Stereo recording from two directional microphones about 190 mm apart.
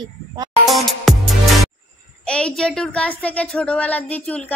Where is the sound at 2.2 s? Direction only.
5° left (ahead or behind).